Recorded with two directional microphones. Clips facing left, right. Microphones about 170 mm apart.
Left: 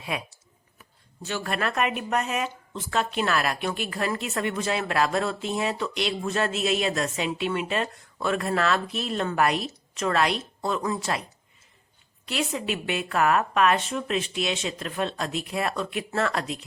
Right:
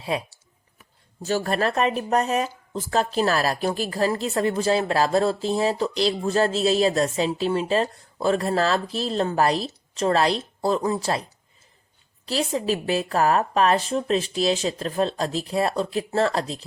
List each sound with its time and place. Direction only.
0.0 s speech: 30° right (ahead or behind)